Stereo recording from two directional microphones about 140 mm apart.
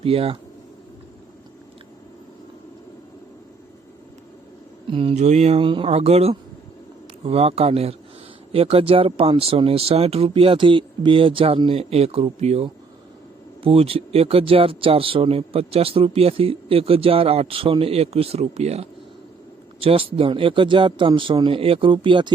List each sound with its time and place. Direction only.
0.0 s speech: 45° right (ahead or behind)
4.9 s speech: 40° right (ahead or behind)
5.1 s speech: 50° right (ahead or behind); by 22.3 s 35° right (ahead or behind)